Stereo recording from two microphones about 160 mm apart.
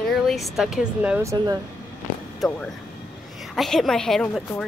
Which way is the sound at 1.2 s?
25° right (ahead or behind).